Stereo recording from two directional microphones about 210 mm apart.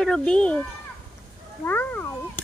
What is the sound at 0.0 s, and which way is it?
Speech, 5° left (ahead or behind).